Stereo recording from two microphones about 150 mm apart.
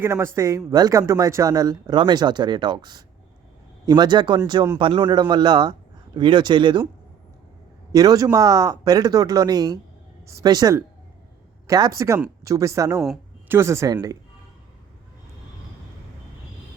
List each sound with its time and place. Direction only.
0.0 s a man's voice: 15° right (ahead or behind); by 6.8 s 30° right (ahead or behind)
7.9 s speech: 25° right (ahead or behind)
11.9 s speech: 20° right (ahead or behind)